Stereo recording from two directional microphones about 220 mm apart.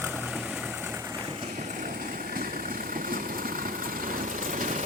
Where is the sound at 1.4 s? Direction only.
35° right (ahead or behind).